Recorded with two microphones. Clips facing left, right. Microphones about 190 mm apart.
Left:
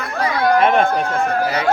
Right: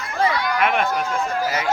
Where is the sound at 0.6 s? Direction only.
30° left (ahead or behind).